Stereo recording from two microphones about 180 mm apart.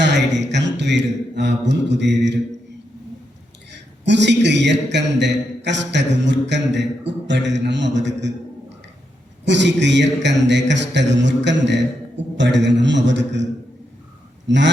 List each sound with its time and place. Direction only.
0.0 s a sound: 75° right (ahead or behind)
0.5 s mantra: 75° right (ahead or behind)
3.7 s a man's voice: 75° right (ahead or behind)
9.4 s a man's voice: 75° right (ahead or behind)